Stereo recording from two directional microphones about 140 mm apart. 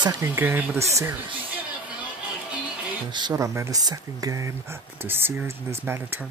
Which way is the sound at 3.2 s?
25° right (ahead or behind).